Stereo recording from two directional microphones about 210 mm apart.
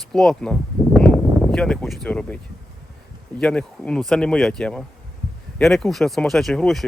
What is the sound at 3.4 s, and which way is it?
Speech, 5° left (ahead or behind).